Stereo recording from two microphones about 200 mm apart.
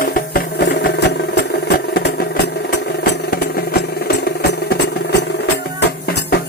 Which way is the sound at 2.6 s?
50° left (ahead or behind).